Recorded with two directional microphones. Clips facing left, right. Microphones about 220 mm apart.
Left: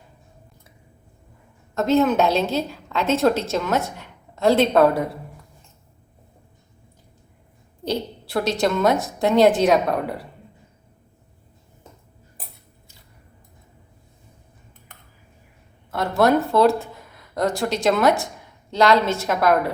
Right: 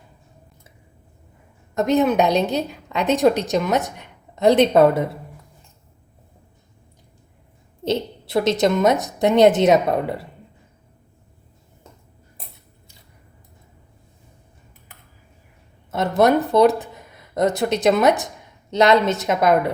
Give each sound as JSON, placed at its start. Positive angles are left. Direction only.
{"t": 1.7, "sound": "a woman's voice", "side_deg": -15}
{"t": 7.9, "sound": "a woman's voice", "side_deg": -20}
{"t": 15.9, "sound": "a woman's voice", "side_deg": -20}